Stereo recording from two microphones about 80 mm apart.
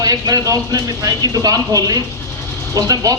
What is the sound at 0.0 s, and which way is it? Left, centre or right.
Speech, right.